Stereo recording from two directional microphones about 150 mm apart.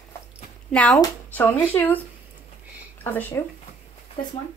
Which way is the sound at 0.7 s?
5° left (ahead or behind).